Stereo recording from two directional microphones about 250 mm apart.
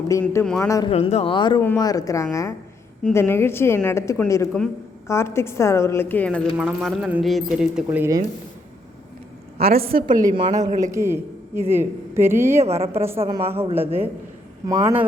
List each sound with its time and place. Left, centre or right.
0.1 s a woman's voice: centre
9.6 s a woman's voice: right
9.8 s a woman's voice: right
10.9 s speech: centre